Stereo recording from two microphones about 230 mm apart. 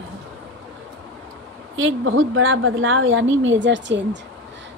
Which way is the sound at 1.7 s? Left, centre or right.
Right.